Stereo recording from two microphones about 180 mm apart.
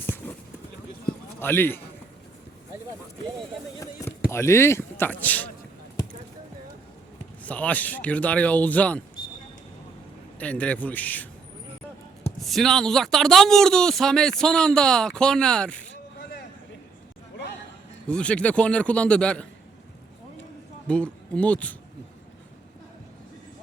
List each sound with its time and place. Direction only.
0.0 s clip-clop: 10° left (ahead or behind)
1.4 s a man's voice: 10° left (ahead or behind)
3.8 s speech: 15° left (ahead or behind)
7.4 s speech: 10° left (ahead or behind)
10.4 s speech: 5° left (ahead or behind)
12.4 s speech: centre (ahead or behind)
15.9 s a sound: 65° left (ahead or behind)
18.1 s speech: 5° left (ahead or behind)
20.8 s speech: 5° left (ahead or behind)